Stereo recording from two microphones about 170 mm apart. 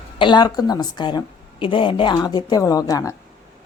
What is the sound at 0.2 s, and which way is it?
A woman's voice, 25° left (ahead or behind).